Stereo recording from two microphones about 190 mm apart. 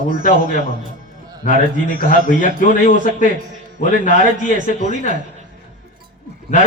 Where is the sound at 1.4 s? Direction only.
45° left (ahead or behind).